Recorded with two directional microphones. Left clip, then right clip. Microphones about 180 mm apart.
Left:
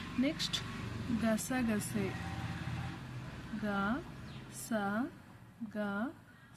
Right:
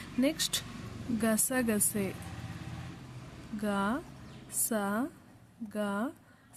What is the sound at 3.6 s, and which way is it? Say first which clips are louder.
Speech: right 4 dB; 50° right (ahead or behind).